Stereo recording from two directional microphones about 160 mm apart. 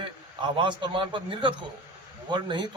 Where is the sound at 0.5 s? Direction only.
30° right (ahead or behind).